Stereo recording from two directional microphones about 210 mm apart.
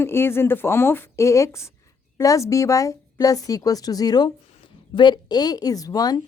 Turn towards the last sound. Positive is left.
turn(degrees=20)  # may be behind; listen again after turning